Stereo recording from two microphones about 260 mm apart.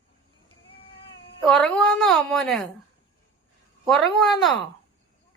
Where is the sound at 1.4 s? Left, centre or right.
Centre.